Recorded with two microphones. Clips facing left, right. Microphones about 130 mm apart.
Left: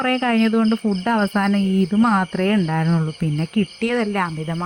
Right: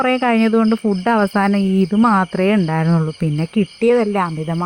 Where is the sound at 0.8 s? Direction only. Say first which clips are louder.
Right 4 dB; 65° right (ahead or behind); by 4.6 s 40° right (ahead or behind).